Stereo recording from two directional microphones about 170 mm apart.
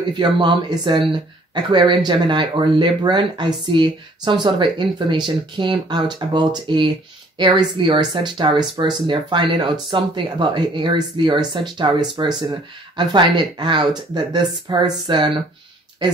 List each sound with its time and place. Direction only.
0.1 s speech: 30° right (ahead or behind)